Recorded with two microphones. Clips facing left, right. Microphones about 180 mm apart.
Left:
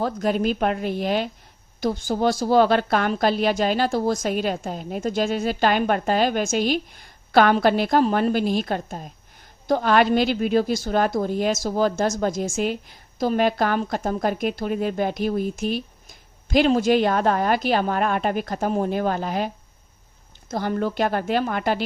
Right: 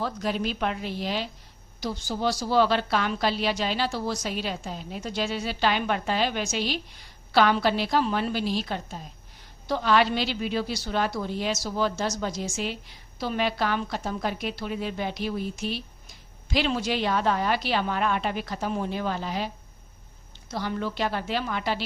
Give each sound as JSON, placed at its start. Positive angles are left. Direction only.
{"t": 0.0, "sound": "a woman's voice", "side_deg": 50}
{"t": 20.5, "sound": "a woman's voice", "side_deg": 50}